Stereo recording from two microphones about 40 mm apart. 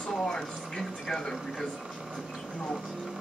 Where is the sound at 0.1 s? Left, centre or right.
Centre.